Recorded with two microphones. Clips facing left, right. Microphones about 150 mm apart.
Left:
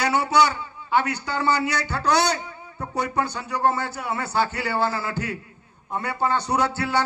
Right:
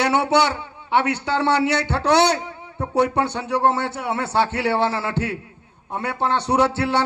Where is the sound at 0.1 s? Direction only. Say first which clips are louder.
Right 2 dB; 60° right (ahead or behind).